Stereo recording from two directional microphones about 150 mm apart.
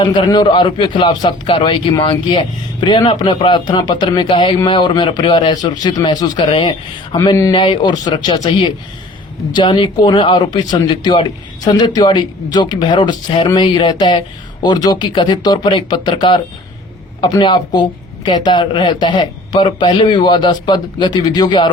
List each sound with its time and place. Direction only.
0.0 s a man's voice: 30° left (ahead or behind)